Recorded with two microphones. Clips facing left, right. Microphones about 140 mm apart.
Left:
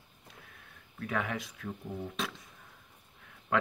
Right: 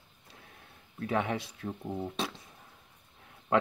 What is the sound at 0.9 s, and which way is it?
Speech, 30° right (ahead or behind).